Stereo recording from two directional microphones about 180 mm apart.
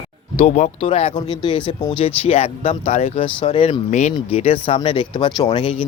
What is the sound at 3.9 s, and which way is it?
Speech, 40° left (ahead or behind).